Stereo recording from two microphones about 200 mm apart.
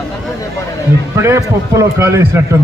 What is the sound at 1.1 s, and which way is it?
A man's voice, 15° right (ahead or behind).